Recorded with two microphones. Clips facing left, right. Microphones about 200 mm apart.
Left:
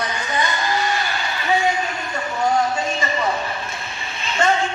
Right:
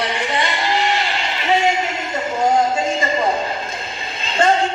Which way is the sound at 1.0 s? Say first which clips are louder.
Right 2 dB; 90° right.